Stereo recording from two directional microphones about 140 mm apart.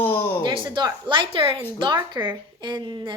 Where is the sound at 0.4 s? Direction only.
35° right (ahead or behind).